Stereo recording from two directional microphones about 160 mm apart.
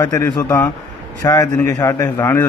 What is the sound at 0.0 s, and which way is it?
A man's voice, 20° left (ahead or behind).